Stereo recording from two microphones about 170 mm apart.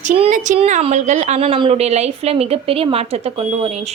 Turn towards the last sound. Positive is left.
turn(degrees=-35)  # may be behind; listen again after turning